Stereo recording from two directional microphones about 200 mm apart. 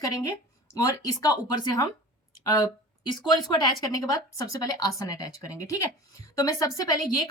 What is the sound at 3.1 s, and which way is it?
A woman's voice, 20° left (ahead or behind).